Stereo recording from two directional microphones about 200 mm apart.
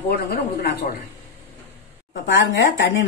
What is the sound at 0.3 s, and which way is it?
Speech, 50° left (ahead or behind).